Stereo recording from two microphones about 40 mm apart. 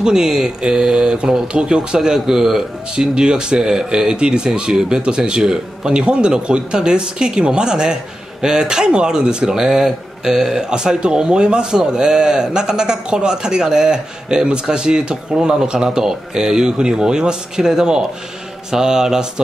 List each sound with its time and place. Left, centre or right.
0.0 s speech: centre
2.0 s speech: centre